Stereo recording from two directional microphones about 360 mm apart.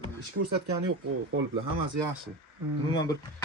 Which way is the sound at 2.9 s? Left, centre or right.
Centre.